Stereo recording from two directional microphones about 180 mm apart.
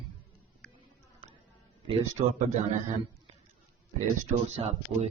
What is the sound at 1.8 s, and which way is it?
A man's voice, 30° right (ahead or behind).